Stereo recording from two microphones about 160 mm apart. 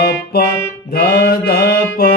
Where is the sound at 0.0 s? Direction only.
90° left.